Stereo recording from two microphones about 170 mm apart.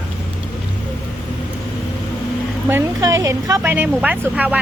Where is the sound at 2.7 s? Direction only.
15° right (ahead or behind).